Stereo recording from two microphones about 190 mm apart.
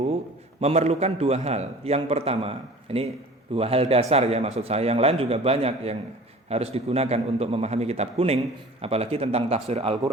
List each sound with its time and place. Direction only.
0.6 s a man's voice: 35° right (ahead or behind)